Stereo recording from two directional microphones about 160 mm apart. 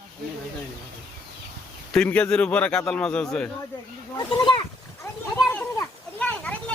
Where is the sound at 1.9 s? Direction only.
5° left (ahead or behind).